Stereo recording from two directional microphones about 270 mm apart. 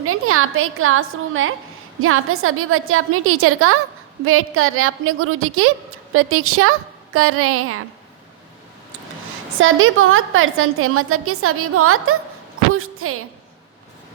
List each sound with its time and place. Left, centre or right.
0.0 s a woman's voice: right
9.6 s a woman's voice: right